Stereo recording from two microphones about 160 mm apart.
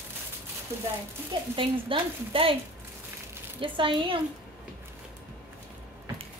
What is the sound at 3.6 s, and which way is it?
Speech, 30° right (ahead or behind).